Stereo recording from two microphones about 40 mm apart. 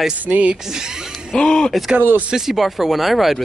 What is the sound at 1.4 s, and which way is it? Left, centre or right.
Speech, left.